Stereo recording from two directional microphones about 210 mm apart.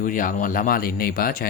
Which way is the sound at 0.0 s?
40° left (ahead or behind).